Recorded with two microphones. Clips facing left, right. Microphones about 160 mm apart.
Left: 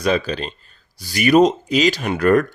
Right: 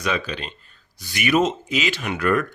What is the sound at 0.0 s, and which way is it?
Speech, 35° left (ahead or behind).